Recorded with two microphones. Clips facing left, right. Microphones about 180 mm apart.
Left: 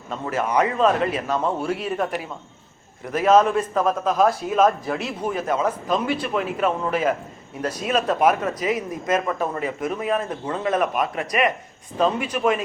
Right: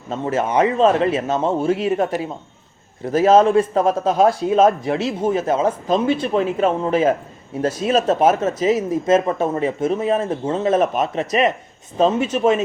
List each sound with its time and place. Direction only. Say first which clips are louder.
0.1 s speech: right 4 dB; 25° right (ahead or behind)